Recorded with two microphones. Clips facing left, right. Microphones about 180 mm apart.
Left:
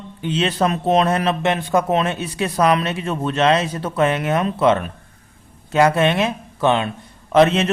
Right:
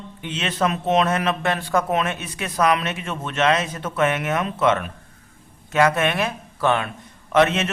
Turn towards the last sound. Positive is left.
turn(degrees=30)  # may be behind; listen again after turning